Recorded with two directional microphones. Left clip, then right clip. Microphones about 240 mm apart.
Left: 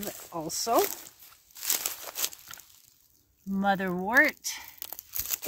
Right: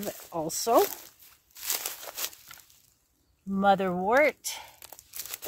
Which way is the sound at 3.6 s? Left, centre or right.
Centre.